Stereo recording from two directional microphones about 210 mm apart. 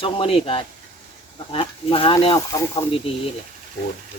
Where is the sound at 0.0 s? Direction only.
25° left (ahead or behind).